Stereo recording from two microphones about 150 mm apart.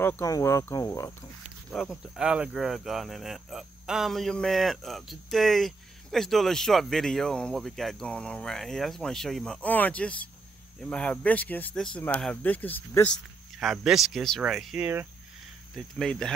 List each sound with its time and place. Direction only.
0.0 s speech: 15° left (ahead or behind)
1.7 s speech: centre (ahead or behind)
13.6 s speech: centre (ahead or behind)